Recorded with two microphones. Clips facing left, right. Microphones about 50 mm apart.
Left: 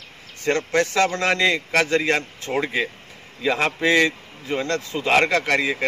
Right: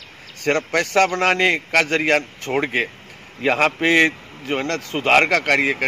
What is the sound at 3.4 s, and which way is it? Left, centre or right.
Speech, right.